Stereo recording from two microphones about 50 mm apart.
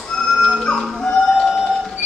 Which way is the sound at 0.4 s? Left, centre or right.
Centre.